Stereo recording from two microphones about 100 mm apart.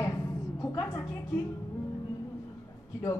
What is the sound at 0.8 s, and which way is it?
Speech, 30° left (ahead or behind).